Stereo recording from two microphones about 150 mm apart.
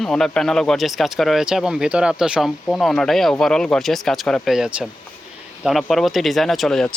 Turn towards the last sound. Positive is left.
turn(degrees=5)  # may be behind; listen again after turning